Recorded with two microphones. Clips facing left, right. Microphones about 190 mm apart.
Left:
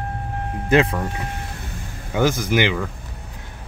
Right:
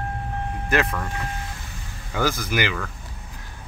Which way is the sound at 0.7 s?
30° left (ahead or behind).